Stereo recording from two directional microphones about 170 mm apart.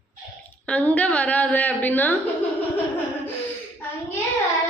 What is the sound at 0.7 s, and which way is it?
A woman's voice, 10° left (ahead or behind).